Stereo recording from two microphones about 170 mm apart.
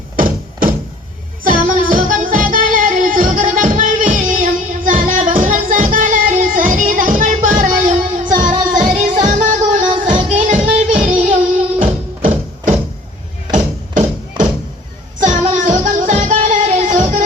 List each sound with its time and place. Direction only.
1.5 s music: 50° right (ahead or behind)